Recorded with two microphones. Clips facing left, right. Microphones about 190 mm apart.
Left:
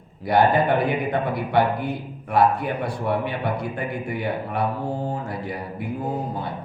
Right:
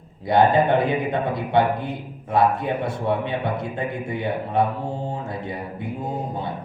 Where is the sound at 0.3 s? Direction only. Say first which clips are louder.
Right 1 dB; 20° right (ahead or behind).